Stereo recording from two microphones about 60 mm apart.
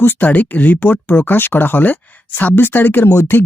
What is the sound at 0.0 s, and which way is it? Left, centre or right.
Speech, left.